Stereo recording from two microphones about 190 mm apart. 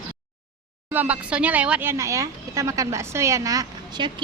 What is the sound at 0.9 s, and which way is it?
Speech, 5° right (ahead or behind).